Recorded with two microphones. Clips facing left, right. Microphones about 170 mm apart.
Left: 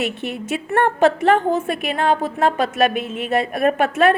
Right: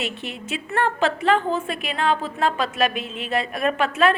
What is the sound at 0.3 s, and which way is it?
A woman's voice, 55° left (ahead or behind).